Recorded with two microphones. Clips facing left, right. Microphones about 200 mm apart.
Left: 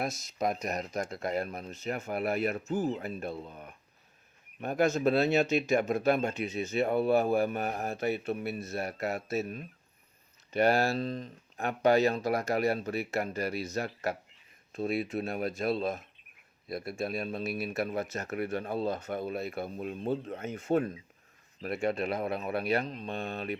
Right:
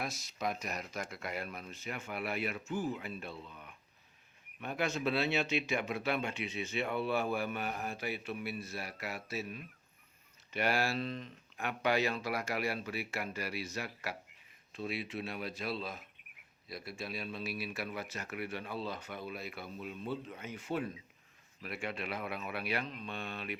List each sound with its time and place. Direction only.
0.3 s speech: 45° left (ahead or behind)